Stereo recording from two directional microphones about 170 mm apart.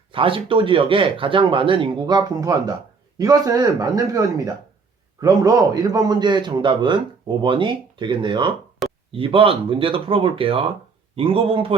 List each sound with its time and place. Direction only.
0.1 s a man's voice: 30° right (ahead or behind)
8.8 s a sound: centre (ahead or behind)
9.1 s speech: 30° right (ahead or behind)